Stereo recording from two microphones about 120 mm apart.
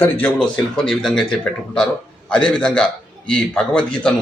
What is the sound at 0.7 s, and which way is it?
Speech, 5° left (ahead or behind).